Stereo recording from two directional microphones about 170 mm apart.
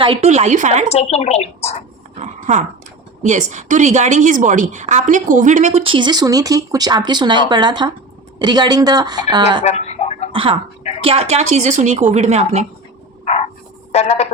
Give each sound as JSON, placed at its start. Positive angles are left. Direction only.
{"t": 0.0, "sound": "speech", "side_deg": -35}
{"t": 0.9, "sound": "a woman's voice", "side_deg": 40}
{"t": 2.1, "sound": "a sound", "side_deg": -45}
{"t": 3.2, "sound": "a woman's voice", "side_deg": -45}
{"t": 9.6, "sound": "a sound", "side_deg": 40}
{"t": 10.3, "sound": "a woman's voice", "side_deg": -30}
{"t": 13.9, "sound": "a woman's voice", "side_deg": 40}